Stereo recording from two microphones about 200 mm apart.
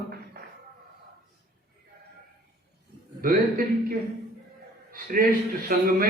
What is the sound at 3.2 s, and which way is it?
A man's voice, 45° right (ahead or behind).